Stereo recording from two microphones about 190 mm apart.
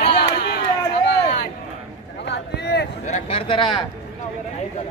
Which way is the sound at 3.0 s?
35° left (ahead or behind).